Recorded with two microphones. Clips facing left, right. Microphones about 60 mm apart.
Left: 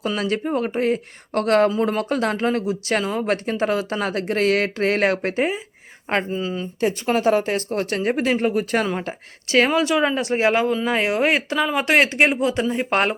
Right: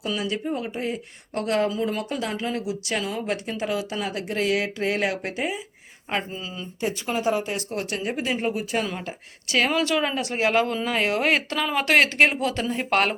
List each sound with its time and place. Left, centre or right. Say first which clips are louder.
0.2 s a woman's voice: left 5 dB; left
6.8 s speech: left 6 dB; left
9.0 s a woman's voice: left 5 dB; left
9.6 s speech: left 4 dB; centre